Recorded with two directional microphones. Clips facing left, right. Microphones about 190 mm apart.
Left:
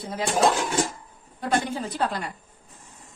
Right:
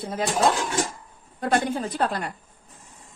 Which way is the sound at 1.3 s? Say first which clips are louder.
Right 2 dB; 50° right (ahead or behind).